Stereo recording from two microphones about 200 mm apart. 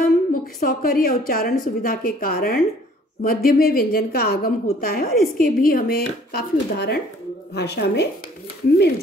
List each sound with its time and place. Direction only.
0.0 s a woman's voice: 45° left (ahead or behind)